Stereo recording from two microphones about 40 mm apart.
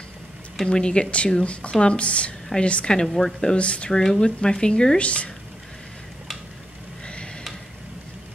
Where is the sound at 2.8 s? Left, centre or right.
Centre.